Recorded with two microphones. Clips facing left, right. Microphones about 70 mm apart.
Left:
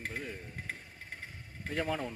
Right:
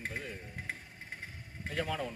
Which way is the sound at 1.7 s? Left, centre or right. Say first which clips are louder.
Left 2 dB; left.